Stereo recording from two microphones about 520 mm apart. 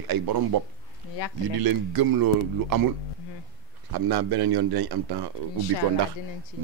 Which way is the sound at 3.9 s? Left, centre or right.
Right.